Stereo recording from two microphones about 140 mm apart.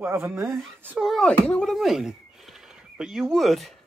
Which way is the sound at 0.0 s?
15° right (ahead or behind).